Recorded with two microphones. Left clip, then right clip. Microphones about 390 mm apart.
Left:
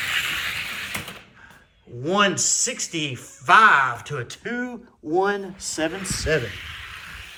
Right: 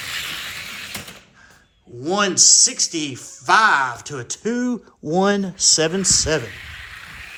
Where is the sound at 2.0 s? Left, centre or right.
Centre.